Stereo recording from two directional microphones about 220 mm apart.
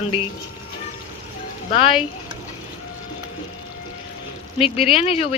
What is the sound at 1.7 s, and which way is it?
Speech, 25° left (ahead or behind).